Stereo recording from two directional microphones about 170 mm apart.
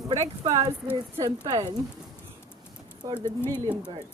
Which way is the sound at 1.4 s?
20° right (ahead or behind).